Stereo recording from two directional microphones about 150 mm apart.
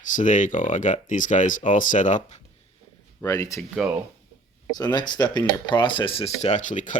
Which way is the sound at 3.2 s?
20° left (ahead or behind).